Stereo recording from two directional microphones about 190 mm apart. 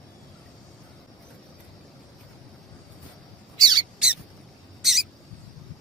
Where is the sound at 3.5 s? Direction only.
20° right (ahead or behind).